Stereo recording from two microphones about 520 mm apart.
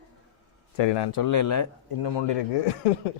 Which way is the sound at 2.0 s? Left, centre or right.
Left.